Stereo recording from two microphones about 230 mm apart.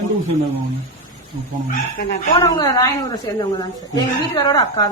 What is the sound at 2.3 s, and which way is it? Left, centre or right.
A woman's voice, centre.